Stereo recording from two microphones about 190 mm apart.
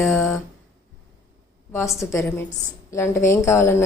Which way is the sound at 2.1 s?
15° left (ahead or behind).